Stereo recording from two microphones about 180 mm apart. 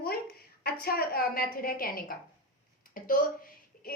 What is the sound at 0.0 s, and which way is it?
A woman's voice, 60° left (ahead or behind).